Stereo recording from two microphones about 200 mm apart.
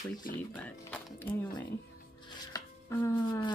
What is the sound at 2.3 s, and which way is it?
Chopping, 15° left (ahead or behind).